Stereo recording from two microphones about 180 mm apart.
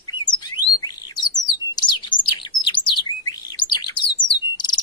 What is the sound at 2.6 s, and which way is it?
Chirp, 25° left (ahead or behind).